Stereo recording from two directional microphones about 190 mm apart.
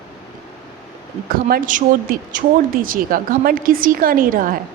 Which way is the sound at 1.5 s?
45° right (ahead or behind).